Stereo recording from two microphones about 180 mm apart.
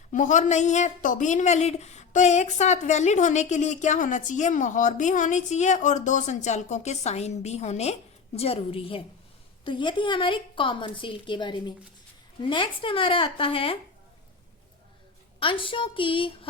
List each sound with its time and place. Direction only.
0.1 s a woman's voice: 45° left (ahead or behind)
15.4 s a woman's voice: 30° left (ahead or behind)